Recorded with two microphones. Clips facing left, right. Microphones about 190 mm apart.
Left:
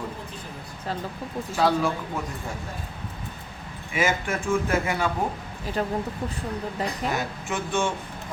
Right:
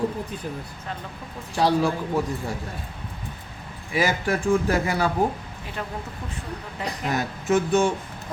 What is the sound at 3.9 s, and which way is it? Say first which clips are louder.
A man's voice: right 2 dB; 35° right (ahead or behind).